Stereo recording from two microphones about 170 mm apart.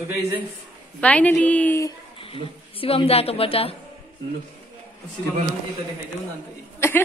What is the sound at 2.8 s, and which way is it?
Speech, 35° left (ahead or behind).